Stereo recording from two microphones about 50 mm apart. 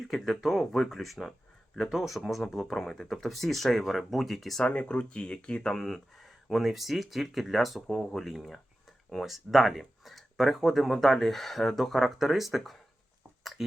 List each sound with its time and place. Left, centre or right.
0.1 s speech: centre
4.6 s speech: left
5.7 s speech: centre